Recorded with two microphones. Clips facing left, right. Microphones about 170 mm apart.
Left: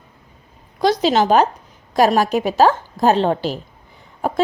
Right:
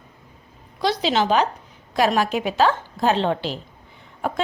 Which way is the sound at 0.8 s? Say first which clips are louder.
Left 5 dB; 45° left (ahead or behind).